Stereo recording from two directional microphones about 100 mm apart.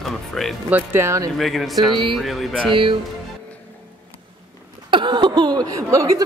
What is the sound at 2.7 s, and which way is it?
Speech, 60° right (ahead or behind).